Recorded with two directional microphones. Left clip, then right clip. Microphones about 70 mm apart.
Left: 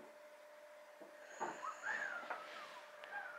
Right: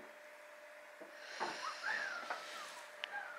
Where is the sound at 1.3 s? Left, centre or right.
Centre.